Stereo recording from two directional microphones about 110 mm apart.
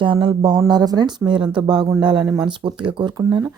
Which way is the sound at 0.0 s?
50° right (ahead or behind).